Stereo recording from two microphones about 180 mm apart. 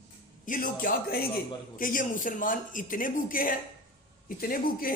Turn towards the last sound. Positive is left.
turn(degrees=50)  # may be behind; listen again after turning